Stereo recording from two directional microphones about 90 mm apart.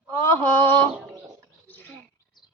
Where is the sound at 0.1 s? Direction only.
30° left (ahead or behind).